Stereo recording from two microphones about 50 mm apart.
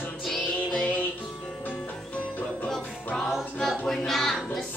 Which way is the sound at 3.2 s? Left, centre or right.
Centre.